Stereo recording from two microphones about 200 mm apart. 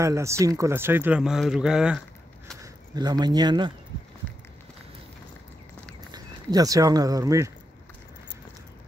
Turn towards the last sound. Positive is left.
turn(degrees=-15)  # may be behind; listen again after turning